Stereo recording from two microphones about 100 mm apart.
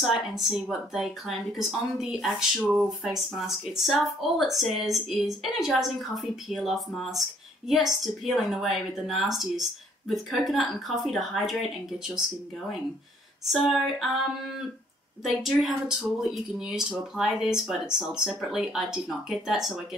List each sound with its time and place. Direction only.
0.0 s a woman's voice: 5° right (ahead or behind)
13.5 s a woman's voice: centre (ahead or behind)
15.3 s a woman's voice: 5° left (ahead or behind)